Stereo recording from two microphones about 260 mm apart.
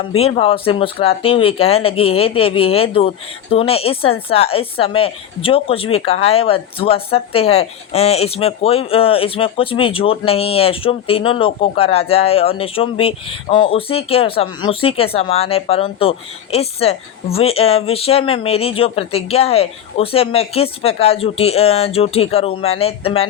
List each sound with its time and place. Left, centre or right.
0.2 s speech: left